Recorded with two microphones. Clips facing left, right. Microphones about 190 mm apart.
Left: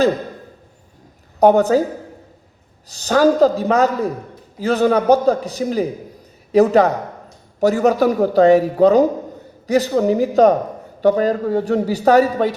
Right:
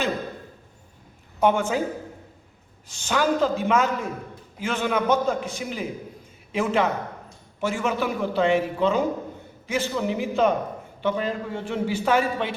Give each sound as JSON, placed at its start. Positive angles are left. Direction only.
{"t": 1.4, "sound": "a man's voice", "side_deg": 40}